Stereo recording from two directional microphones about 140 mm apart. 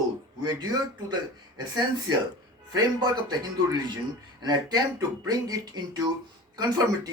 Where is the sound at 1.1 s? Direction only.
30° right (ahead or behind).